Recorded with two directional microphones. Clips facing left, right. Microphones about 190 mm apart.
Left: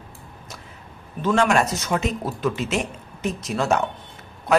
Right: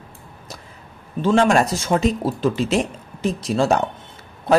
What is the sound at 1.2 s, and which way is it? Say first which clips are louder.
Speech: right 3 dB; 30° right (ahead or behind).